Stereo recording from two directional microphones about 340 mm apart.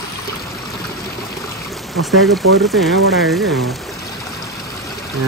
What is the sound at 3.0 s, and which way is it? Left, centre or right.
Speech, right.